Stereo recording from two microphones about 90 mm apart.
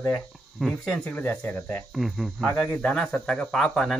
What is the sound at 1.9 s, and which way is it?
Speech, centre (ahead or behind).